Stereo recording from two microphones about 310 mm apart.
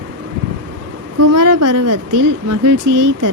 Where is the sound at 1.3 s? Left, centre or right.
Right.